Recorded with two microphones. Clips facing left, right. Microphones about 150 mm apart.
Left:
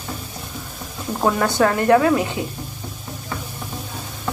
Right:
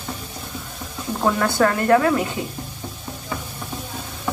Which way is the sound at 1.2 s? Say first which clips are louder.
Left 1 dB; 15° left (ahead or behind).